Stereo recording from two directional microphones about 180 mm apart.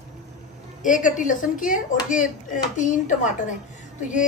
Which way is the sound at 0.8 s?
45° left (ahead or behind).